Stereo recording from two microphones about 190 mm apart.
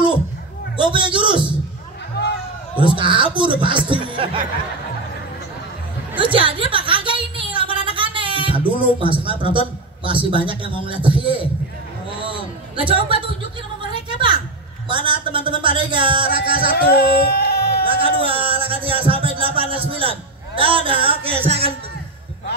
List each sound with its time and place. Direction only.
0.7 s a man's voice: 25° right (ahead or behind)
3.0 s a woman's voice: 25° right (ahead or behind)
6.1 s a sound: 25° right (ahead or behind)
8.7 s a man's voice: 25° right (ahead or behind)
12.3 s a sound: 25° right (ahead or behind)
14.9 s a man's voice: 25° right (ahead or behind)
16.6 s speech: 55° left (ahead or behind)
17.8 s speech: 30° right (ahead or behind)
18.9 s music: 30° right (ahead or behind)
19.9 s a man's voice: 30° right (ahead or behind)